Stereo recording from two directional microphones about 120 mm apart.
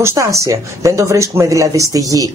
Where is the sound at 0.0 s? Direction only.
25° right (ahead or behind).